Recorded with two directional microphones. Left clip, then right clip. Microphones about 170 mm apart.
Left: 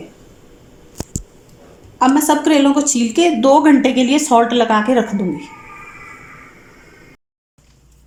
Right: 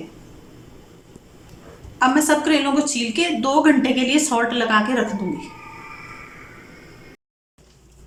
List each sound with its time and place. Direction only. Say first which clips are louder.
2.0 s a woman's voice: left 3 dB; 35° left (ahead or behind)